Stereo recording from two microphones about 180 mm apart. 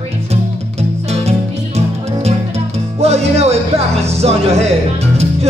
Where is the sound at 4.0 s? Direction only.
35° right (ahead or behind).